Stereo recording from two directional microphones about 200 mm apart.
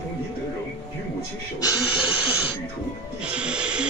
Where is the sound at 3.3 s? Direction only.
5° right (ahead or behind).